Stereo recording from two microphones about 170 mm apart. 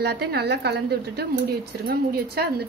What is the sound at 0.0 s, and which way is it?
A woman's voice, 70° right (ahead or behind).